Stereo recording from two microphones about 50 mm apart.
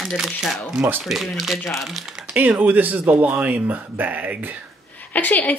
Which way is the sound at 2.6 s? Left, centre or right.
Right.